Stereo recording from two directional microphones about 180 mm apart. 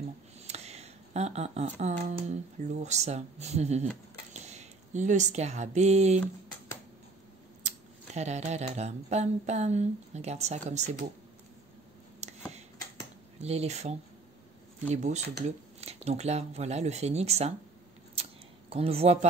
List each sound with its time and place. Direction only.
0.4 s a sound: 35° right (ahead or behind)
2.8 s speech: 40° right (ahead or behind)
7.6 s speech: 40° right (ahead or behind)
12.2 s a sound: 40° right (ahead or behind)
13.4 s speech: 35° right (ahead or behind)
18.7 s speech: 35° right (ahead or behind)